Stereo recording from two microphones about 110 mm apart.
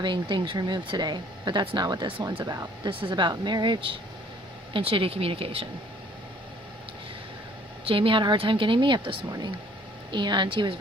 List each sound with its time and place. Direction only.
0.0 s speech: 45° right (ahead or behind)
2.2 s speech: 35° right (ahead or behind); by 5.6 s 60° right (ahead or behind)
7.9 s speech: 55° right (ahead or behind)